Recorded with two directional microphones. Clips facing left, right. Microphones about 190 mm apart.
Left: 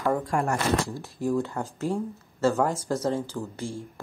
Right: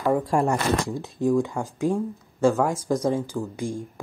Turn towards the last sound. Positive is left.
turn(degrees=-15)  # may be behind; listen again after turning